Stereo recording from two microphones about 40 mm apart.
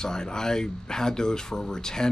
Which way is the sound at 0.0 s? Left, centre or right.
Centre.